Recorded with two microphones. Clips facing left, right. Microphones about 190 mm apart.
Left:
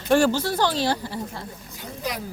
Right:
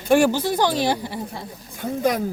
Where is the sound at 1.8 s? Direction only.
50° right (ahead or behind).